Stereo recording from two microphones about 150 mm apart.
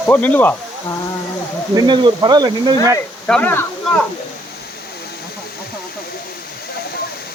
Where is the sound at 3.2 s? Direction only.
10° left (ahead or behind).